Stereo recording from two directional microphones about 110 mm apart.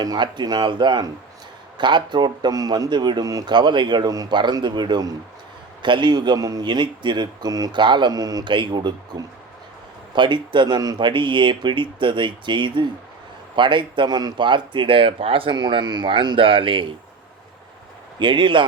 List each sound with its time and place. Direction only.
0.0 s a man's voice: 40° right (ahead or behind)
18.2 s a man's voice: 45° right (ahead or behind)